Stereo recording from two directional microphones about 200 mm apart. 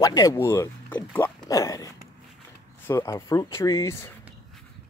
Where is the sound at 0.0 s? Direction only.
15° left (ahead or behind).